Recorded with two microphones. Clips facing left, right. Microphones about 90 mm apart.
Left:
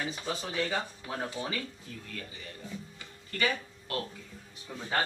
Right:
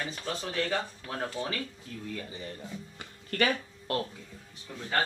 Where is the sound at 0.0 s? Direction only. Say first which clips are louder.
Even; 10° left (ahead or behind).